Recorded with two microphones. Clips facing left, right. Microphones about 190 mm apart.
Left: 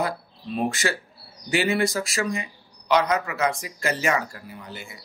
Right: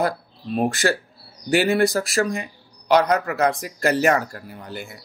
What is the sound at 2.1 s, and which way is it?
Speech, 55° right (ahead or behind).